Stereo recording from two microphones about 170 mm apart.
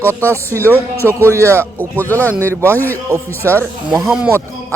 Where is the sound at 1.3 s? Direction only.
15° right (ahead or behind).